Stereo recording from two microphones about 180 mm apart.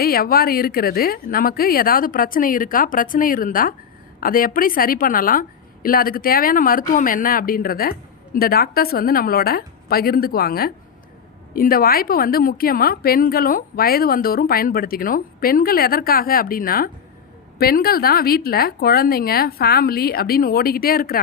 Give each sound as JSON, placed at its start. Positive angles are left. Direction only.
{"t": 0.0, "sound": "a woman's voice", "side_deg": 55}